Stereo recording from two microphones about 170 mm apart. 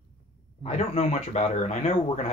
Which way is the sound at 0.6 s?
40° left (ahead or behind).